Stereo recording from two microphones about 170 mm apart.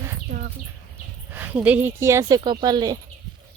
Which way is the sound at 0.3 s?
50° right (ahead or behind).